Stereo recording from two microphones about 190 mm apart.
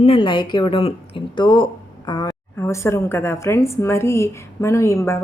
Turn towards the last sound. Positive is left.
turn(degrees=15)  # may be behind; listen again after turning